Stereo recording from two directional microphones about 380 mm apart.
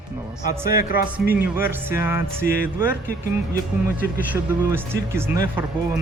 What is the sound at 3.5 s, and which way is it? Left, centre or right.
Speech, centre.